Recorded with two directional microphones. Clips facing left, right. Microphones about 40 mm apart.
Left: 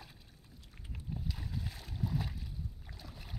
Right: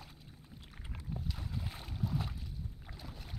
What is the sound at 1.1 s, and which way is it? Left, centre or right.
Boat, centre.